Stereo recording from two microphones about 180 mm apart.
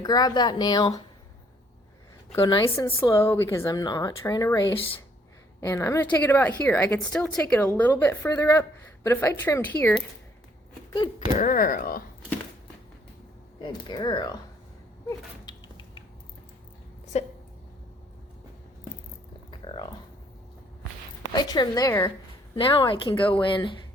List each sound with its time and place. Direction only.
0.0 s a woman's voice: 20° left (ahead or behind)
2.4 s a woman's voice: 25° left (ahead or behind)
2.7 s a woman's voice: 15° left (ahead or behind)
11.3 s speech: 50° left (ahead or behind)
13.6 s a woman's voice: 25° left (ahead or behind)
17.1 s speech: 35° left (ahead or behind)
19.5 s a sound: 25° left (ahead or behind)
21.3 s a woman's voice: 25° left (ahead or behind)
22.5 s a woman's voice: 30° left (ahead or behind)